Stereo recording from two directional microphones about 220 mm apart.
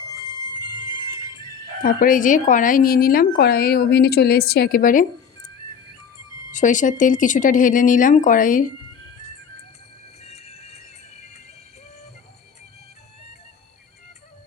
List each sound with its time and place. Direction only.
0.1 s a sound: 20° left (ahead or behind)
1.8 s speech: 40° left (ahead or behind)
6.5 s speech: 35° left (ahead or behind)
10.2 s music: 30° left (ahead or behind)